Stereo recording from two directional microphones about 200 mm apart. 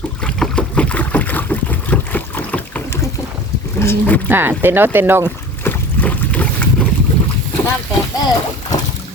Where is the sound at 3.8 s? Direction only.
10° left (ahead or behind).